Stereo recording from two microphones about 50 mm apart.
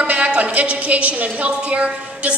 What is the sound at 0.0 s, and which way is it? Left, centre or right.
A woman's voice, right.